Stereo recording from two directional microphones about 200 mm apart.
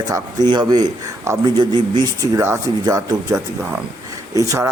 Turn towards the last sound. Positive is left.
turn(degrees=-15)  # may be behind; listen again after turning